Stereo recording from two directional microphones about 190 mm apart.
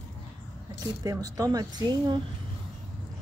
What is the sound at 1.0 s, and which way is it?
A woman's voice, 20° right (ahead or behind).